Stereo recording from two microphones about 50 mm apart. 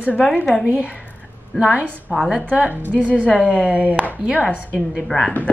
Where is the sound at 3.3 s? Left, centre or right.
Right.